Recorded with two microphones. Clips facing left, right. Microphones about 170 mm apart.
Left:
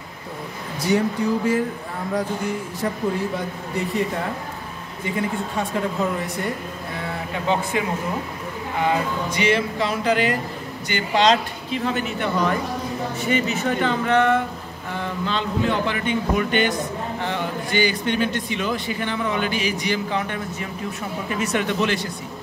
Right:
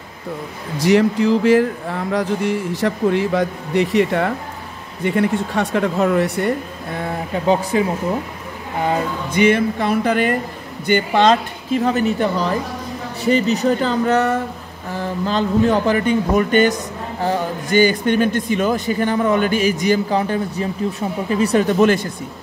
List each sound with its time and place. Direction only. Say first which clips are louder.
0.7 s speech: right 6 dB; 90° right
5.0 s speech: right 7 dB; 65° right (ahead or behind)
7.7 s speech: right 6 dB; 35° right (ahead or behind)
9.3 s speech: right 8 dB; 55° right (ahead or behind)